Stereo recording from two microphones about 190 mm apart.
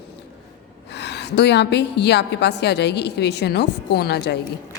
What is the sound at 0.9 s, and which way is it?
A woman's voice, 60° left (ahead or behind).